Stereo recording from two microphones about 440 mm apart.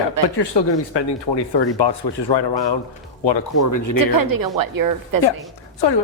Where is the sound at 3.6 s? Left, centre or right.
Left.